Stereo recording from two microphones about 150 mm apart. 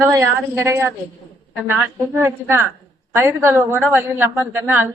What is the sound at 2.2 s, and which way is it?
A man's voice, 15° right (ahead or behind).